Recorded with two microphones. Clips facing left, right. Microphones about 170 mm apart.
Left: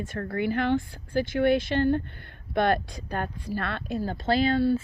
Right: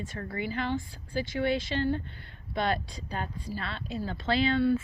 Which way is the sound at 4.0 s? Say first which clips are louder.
Left 3 dB; 45° left (ahead or behind).